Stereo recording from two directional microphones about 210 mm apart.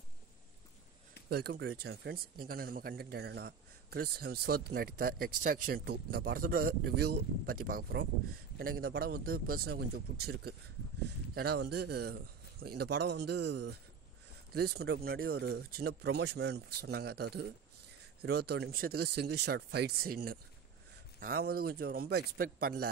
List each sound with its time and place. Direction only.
1.3 s speech: 50° right (ahead or behind)